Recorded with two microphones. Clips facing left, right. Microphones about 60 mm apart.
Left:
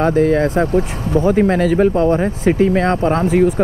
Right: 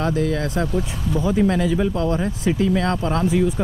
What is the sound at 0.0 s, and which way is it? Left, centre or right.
Speech, left.